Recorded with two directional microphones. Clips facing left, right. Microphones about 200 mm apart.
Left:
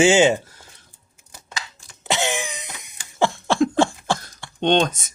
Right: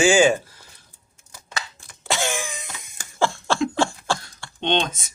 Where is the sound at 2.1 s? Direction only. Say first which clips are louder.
Left 2 dB; 20° left (ahead or behind).